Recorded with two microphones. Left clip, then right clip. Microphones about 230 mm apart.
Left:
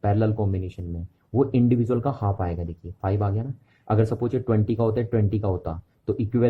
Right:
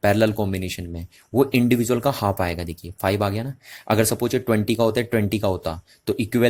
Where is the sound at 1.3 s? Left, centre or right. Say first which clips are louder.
Right 3 dB; right.